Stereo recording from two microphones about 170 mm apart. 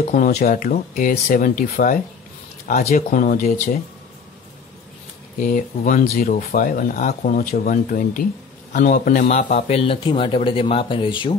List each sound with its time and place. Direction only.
0.1 s speech: 55° left (ahead or behind)
5.4 s speech: 50° left (ahead or behind)
9.3 s speech: 40° left (ahead or behind)